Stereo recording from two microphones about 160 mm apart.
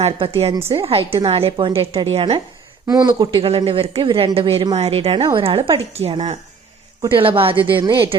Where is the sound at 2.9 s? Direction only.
25° right (ahead or behind).